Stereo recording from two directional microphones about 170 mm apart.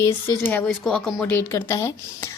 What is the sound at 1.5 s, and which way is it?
Speech, 15° left (ahead or behind).